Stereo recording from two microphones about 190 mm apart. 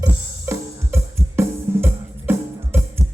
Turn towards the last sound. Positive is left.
turn(degrees=-15)  # may be behind; listen again after turning